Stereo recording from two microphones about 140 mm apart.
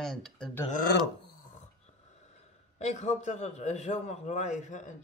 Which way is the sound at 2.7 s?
55° left (ahead or behind).